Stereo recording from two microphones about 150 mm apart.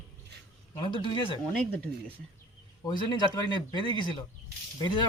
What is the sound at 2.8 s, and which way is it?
A man's voice, 30° left (ahead or behind).